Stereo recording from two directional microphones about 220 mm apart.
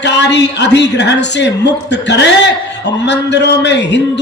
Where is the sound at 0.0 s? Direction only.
50° left (ahead or behind).